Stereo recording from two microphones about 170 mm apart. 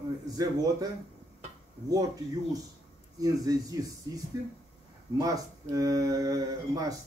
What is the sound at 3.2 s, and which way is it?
Speech, 20° right (ahead or behind).